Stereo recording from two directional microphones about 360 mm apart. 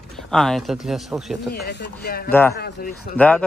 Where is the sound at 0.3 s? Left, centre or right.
Centre.